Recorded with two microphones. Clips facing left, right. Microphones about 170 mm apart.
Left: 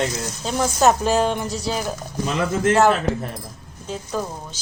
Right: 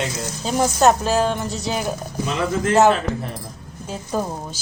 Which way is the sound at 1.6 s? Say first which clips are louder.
Right 2 dB; centre (ahead or behind).